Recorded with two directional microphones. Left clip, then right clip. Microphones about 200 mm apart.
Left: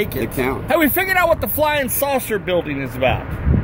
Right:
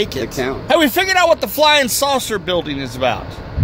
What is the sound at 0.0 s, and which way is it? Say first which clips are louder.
A man's voice: right 1 dB; 20° right (ahead or behind).